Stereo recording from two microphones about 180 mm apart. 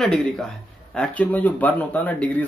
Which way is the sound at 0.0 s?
Centre (ahead or behind).